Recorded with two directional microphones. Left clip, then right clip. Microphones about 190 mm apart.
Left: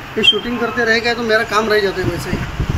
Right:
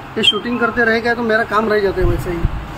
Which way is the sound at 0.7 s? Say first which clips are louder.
Left 1 dB; 30° right (ahead or behind).